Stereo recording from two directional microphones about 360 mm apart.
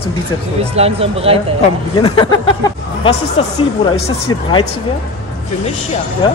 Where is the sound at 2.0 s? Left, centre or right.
Centre.